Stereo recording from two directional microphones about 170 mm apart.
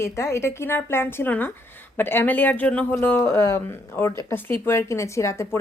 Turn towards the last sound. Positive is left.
turn(degrees=15)  # may be behind; listen again after turning